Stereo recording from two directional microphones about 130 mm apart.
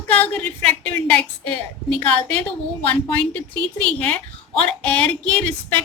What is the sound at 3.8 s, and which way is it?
A woman's voice, 10° left (ahead or behind).